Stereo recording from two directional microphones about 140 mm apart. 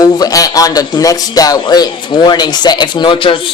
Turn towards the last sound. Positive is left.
turn(degrees=35)  # may be behind; listen again after turning